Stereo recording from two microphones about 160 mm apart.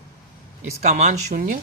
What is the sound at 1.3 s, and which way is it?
Speech, 55° right (ahead or behind).